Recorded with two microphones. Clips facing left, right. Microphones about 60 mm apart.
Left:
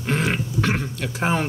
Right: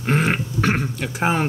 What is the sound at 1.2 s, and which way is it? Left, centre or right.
Speech, right.